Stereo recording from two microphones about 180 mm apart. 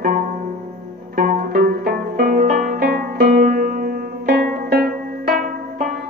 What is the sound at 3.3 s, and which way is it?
Music, 45° right (ahead or behind).